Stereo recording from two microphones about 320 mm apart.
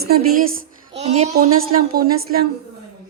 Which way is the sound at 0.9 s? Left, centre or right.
Centre.